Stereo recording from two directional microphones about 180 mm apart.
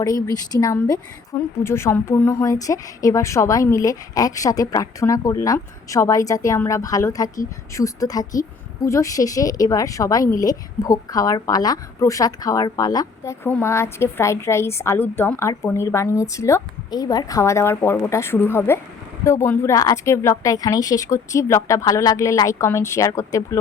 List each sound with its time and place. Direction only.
0.0 s a woman's voice: 20° left (ahead or behind)